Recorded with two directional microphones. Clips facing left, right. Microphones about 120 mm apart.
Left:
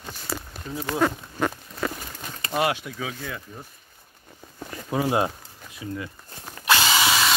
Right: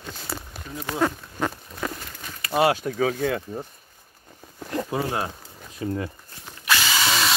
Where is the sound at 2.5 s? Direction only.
35° right (ahead or behind).